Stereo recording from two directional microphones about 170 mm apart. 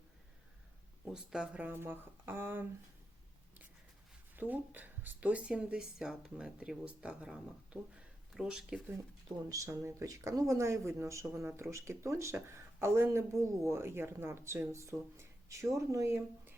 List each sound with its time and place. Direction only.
1.0 s speech: 5° right (ahead or behind)
4.4 s speech: 10° right (ahead or behind)
9.5 s speech: 20° right (ahead or behind)